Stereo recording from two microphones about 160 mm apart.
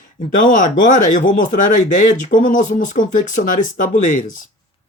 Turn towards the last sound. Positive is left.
turn(degrees=55)  # may be behind; listen again after turning